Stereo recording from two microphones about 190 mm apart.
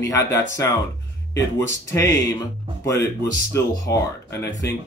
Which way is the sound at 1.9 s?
20° left (ahead or behind).